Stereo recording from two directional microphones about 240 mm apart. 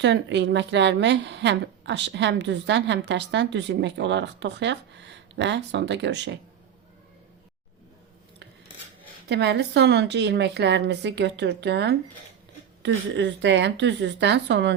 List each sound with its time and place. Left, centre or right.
0.0 s a woman's voice: right
9.3 s a woman's voice: right